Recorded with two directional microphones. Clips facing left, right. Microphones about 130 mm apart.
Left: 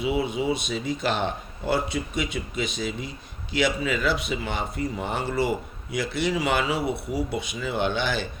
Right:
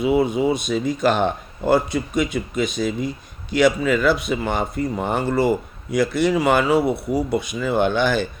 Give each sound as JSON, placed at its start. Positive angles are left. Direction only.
{"t": 0.0, "sound": "speech", "side_deg": -50}